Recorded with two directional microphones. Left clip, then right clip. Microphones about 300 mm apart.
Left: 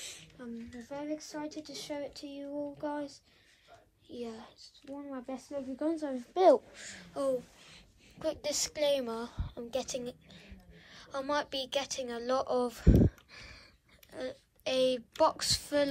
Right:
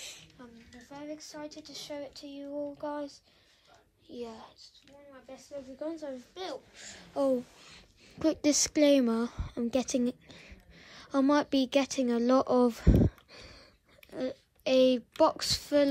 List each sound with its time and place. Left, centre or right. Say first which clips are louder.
0.0 s speech: left 1 dB; centre
5.9 s a woman's voice: left 9 dB; left
6.7 s a woman's voice: right 3 dB; centre
13.3 s a sound: even; centre
14.1 s speech: right 4 dB; centre